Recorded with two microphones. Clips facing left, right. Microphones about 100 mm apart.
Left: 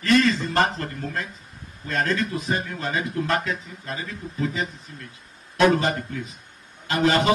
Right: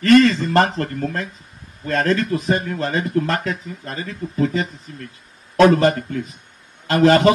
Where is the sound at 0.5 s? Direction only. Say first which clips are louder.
Right 5 dB; 45° right (ahead or behind).